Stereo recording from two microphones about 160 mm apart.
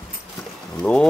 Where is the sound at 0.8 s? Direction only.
10° left (ahead or behind).